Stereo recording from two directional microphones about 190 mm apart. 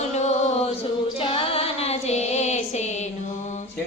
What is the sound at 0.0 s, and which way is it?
Female singing, 35° left (ahead or behind).